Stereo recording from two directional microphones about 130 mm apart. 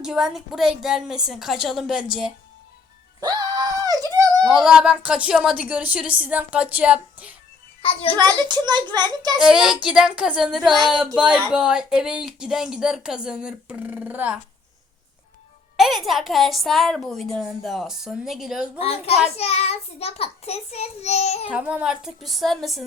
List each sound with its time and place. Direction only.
0.0 s a woman's voice: 5° right (ahead or behind)
3.2 s a sound: 30° right (ahead or behind)
4.4 s speech: 5° right (ahead or behind)
7.8 s a child's voice: 45° left (ahead or behind)
8.1 s a child's voice: 15° left (ahead or behind)
8.4 s a child's voice: 35° right (ahead or behind)
9.4 s a woman's voice: 5° right (ahead or behind)
15.8 s a woman's voice: centre (ahead or behind)
18.8 s child singing: 50° left (ahead or behind)
21.5 s a woman's voice: 10° right (ahead or behind)